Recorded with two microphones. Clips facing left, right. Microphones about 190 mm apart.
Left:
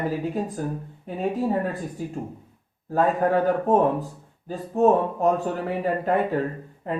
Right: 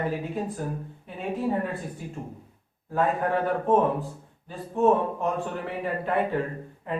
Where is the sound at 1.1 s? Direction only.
40° left (ahead or behind).